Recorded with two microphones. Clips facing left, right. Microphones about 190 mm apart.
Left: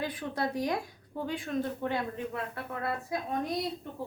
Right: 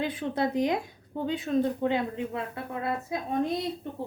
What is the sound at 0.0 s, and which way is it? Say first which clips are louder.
Speech: right 5 dB; 20° right (ahead or behind).